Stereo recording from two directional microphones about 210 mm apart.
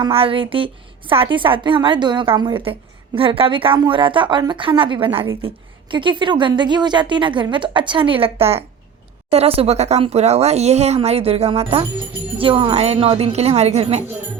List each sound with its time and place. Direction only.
0.0 s a woman's voice: 25° right (ahead or behind)